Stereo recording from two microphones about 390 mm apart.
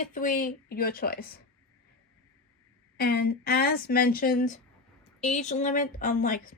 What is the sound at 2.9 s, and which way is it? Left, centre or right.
Speech, left.